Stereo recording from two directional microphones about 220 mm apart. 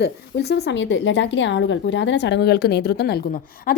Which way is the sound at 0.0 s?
50° left (ahead or behind).